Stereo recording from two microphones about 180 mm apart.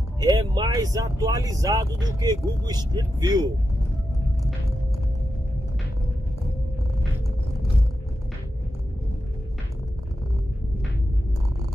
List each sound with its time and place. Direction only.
0.2 s speech: 20° right (ahead or behind)